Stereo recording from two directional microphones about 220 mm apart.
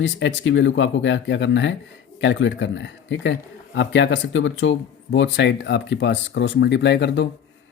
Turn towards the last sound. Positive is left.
turn(degrees=50)  # may be behind; listen again after turning